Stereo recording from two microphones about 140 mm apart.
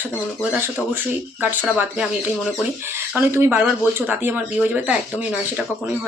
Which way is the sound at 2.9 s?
15° right (ahead or behind).